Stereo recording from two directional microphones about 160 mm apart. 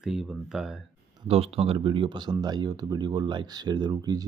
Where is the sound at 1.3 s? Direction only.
40° right (ahead or behind).